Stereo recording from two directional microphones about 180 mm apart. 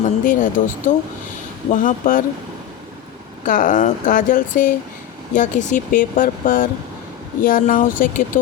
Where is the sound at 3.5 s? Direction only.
50° left (ahead or behind).